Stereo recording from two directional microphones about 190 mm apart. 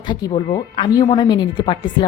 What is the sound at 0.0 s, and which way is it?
Speech, 25° left (ahead or behind).